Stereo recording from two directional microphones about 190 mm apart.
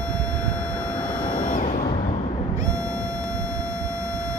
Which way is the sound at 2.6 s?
15° right (ahead or behind).